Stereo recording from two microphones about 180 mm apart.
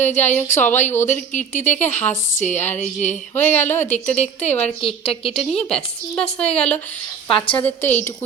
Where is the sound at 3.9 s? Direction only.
40° left (ahead or behind).